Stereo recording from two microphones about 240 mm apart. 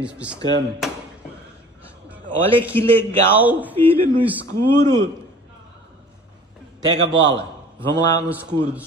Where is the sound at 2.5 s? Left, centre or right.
Centre.